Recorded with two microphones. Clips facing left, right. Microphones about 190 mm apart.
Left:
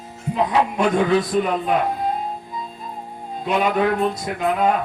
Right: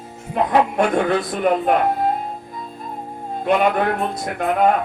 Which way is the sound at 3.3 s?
55° right (ahead or behind).